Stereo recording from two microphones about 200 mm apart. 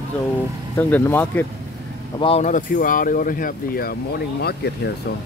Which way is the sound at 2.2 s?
30° left (ahead or behind).